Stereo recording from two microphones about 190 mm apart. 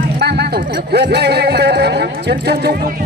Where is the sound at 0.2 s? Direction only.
60° right (ahead or behind).